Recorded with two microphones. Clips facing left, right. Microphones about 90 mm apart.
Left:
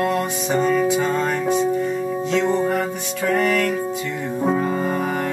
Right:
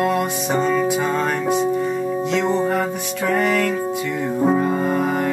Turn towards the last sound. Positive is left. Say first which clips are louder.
# right 2 dB
turn(degrees=-5)  # may be behind; listen again after turning